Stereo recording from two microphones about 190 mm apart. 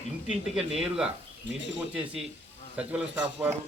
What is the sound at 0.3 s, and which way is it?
Speech, centre (ahead or behind).